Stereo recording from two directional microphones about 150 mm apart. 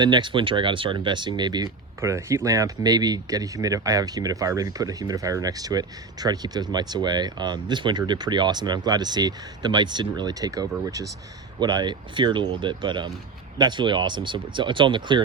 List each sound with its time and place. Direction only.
0.0 s speech: 30° right (ahead or behind)